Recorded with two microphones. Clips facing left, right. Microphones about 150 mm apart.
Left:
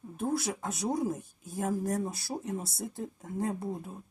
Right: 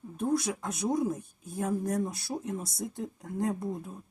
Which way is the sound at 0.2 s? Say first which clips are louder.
Right 2 dB; 5° left (ahead or behind).